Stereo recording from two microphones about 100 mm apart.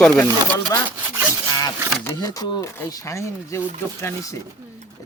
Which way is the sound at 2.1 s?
40° left (ahead or behind).